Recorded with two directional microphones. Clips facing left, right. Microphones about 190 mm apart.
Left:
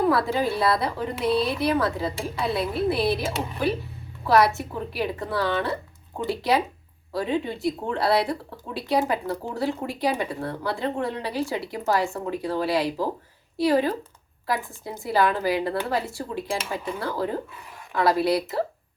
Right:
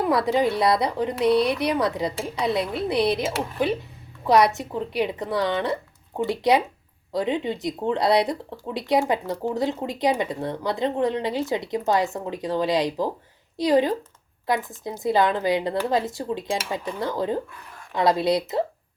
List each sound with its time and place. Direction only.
0.0 s speech: 20° right (ahead or behind)